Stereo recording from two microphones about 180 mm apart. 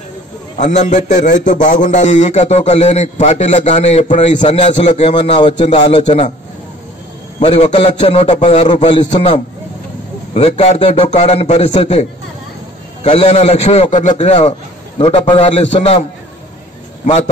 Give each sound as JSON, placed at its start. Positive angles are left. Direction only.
{"t": 0.6, "sound": "a man's voice", "side_deg": 40}
{"t": 7.3, "sound": "a man's voice", "side_deg": 35}
{"t": 10.3, "sound": "a man's voice", "side_deg": 35}
{"t": 17.0, "sound": "a man's voice", "side_deg": 40}